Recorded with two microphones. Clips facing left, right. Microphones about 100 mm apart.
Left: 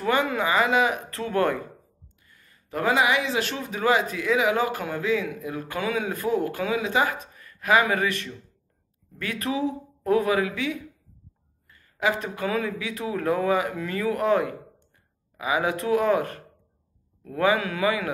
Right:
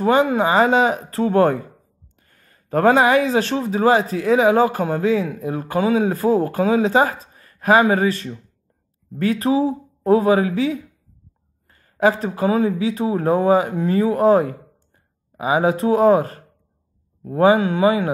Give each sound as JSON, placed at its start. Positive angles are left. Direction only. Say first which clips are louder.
{"t": 0.0, "sound": "speech", "louder": "right 7 dB", "side_deg": -30}
{"t": 2.2, "sound": "speech", "louder": "right 4 dB", "side_deg": -45}